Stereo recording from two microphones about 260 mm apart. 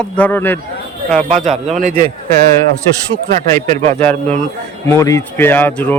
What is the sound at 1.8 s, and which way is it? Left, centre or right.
Speech, right.